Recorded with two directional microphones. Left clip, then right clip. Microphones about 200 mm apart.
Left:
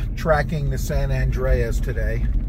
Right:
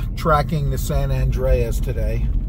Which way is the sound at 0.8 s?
15° right (ahead or behind).